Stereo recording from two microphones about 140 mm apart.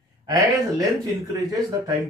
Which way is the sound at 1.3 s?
25° right (ahead or behind).